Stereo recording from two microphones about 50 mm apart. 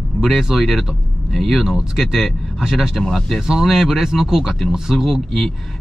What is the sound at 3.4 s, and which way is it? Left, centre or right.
Speech, centre.